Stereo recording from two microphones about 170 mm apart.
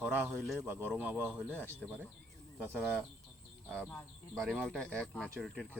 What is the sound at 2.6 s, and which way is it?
Speech, 5° right (ahead or behind).